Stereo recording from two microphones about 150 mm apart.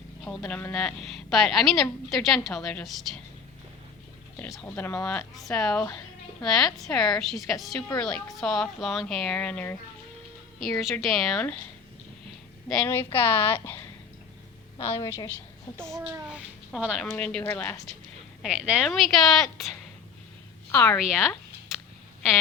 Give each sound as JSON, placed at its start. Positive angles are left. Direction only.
{"t": 0.3, "sound": "a woman's voice", "side_deg": 10}
{"t": 4.4, "sound": "a woman's voice", "side_deg": 0}
{"t": 4.7, "sound": "speech", "side_deg": 20}
{"t": 5.0, "sound": "a woman's voice", "side_deg": 5}
{"t": 12.6, "sound": "a woman's voice", "side_deg": 5}
{"t": 16.3, "sound": "a woman's voice", "side_deg": -5}
{"t": 17.2, "sound": "speech", "side_deg": 5}
{"t": 18.4, "sound": "a woman's voice", "side_deg": -5}
{"t": 20.7, "sound": "speech", "side_deg": 15}
{"t": 21.0, "sound": "a woman's voice", "side_deg": -5}